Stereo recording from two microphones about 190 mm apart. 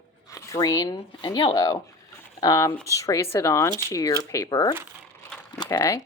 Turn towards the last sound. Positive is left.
turn(degrees=20)  # may be behind; listen again after turning